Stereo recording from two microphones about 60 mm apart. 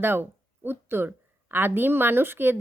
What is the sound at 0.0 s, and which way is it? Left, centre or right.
Speech, right.